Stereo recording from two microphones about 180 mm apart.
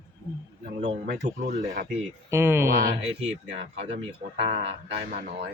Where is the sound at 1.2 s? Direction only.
60° right (ahead or behind).